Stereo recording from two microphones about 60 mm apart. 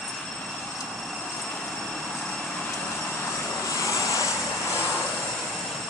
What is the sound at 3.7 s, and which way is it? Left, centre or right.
Vehicle, left.